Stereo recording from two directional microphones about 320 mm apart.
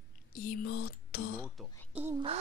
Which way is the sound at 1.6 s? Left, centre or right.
Centre.